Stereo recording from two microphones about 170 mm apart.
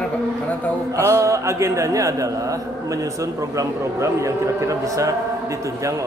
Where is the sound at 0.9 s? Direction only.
15° right (ahead or behind).